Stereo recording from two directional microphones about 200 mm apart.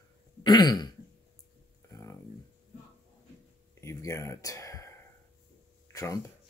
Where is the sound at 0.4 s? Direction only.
20° left (ahead or behind).